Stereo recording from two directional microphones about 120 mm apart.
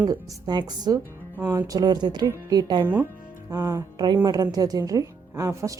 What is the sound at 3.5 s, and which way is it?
Music, 25° right (ahead or behind).